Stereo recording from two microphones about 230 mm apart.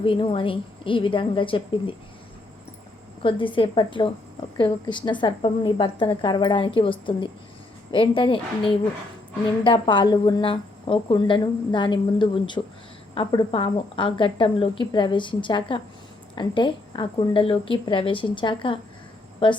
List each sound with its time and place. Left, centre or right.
0.0 s a woman's voice: left
3.2 s a woman's voice: left